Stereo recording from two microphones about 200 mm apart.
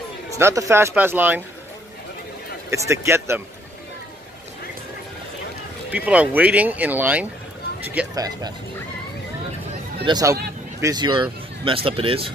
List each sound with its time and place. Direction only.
0.4 s speech: 15° right (ahead or behind)
2.7 s speech: 15° right (ahead or behind)
5.9 s speech: 5° right (ahead or behind)
7.8 s music: 10° right (ahead or behind)
8.2 s speech: 20° right (ahead or behind)
10.0 s speech: 20° right (ahead or behind)